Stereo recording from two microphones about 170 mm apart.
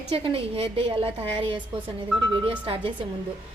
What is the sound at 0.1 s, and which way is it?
A woman's voice, 35° right (ahead or behind).